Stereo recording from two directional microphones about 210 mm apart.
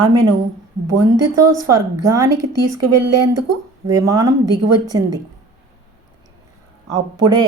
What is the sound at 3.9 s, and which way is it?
A woman's voice, 15° right (ahead or behind).